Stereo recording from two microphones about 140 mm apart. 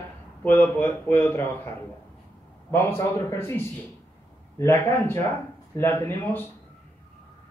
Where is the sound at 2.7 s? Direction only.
15° left (ahead or behind).